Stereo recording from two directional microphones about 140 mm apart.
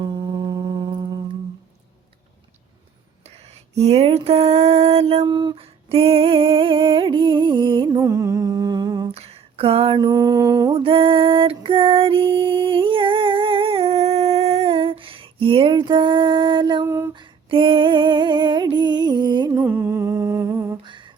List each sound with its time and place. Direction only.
0.0 s a sound: 30° right (ahead or behind)
3.2 s a sound: 50° right (ahead or behind)
7.9 s humming: 20° right (ahead or behind)
9.1 s a sound: 45° right (ahead or behind); by 10.8 s 25° right (ahead or behind)
10.8 s music: 40° right (ahead or behind)
16.8 s female singing: 20° right (ahead or behind)
17.2 s female singing: 35° right (ahead or behind)
19.5 s humming: 15° right (ahead or behind)
20.8 s humming: 35° right (ahead or behind)